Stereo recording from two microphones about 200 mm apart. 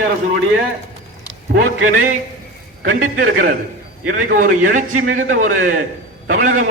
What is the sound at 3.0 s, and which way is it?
A man's voice, 50° right (ahead or behind).